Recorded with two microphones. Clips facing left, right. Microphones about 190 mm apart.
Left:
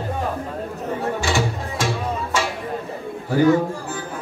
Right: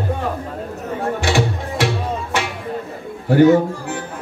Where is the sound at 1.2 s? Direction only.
65° right (ahead or behind).